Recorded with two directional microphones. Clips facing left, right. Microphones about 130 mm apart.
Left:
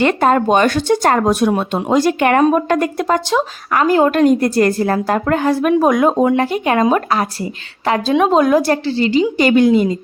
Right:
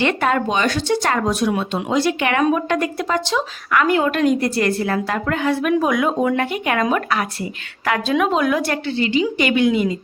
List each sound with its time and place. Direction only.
0.0 s a woman's voice: 40° left (ahead or behind)